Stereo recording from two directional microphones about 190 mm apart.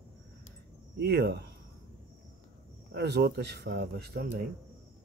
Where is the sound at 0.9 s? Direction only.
60° right (ahead or behind).